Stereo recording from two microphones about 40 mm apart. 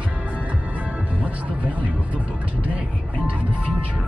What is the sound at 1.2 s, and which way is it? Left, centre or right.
Speech, right.